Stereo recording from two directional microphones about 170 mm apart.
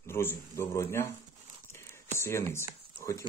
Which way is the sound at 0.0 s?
15° left (ahead or behind).